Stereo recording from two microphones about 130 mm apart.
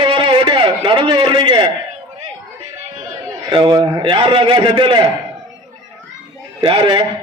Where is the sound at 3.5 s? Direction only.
35° right (ahead or behind).